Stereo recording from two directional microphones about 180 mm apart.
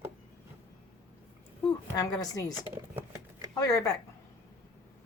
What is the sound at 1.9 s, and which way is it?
Speech, 20° left (ahead or behind).